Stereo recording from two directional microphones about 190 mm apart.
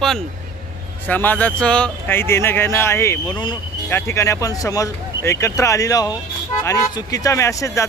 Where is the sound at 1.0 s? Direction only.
10° left (ahead or behind).